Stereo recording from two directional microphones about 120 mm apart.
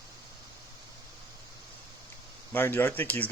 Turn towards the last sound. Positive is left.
turn(degrees=15)  # may be behind; listen again after turning